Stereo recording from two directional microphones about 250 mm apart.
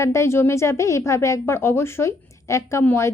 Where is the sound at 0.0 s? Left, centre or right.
Centre.